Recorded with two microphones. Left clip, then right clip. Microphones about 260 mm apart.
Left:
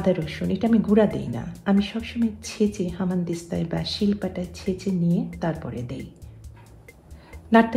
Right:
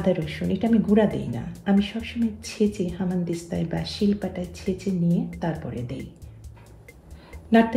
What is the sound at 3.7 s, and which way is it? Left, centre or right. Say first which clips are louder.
Speech: even; left.